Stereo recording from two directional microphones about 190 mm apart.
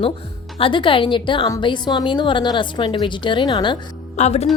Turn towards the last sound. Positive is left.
turn(degrees=35)  # may be behind; listen again after turning